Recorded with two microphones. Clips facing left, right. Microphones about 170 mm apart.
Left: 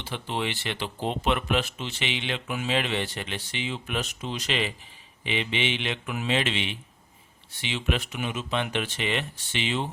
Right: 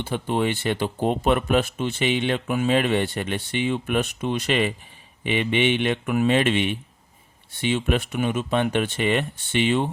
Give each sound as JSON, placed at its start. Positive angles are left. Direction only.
{"t": 0.0, "sound": "speech", "side_deg": -50}